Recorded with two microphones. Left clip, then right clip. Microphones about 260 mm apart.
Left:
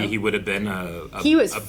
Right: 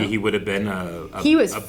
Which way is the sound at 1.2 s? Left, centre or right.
Left.